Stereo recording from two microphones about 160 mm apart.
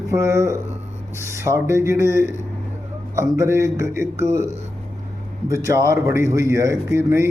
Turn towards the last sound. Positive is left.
turn(degrees=-15)  # may be behind; listen again after turning